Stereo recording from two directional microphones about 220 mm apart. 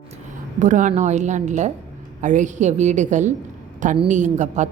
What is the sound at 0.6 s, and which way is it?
A woman's voice, 35° right (ahead or behind).